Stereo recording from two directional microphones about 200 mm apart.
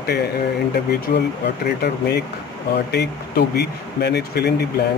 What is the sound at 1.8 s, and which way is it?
Speech, 55° left (ahead or behind).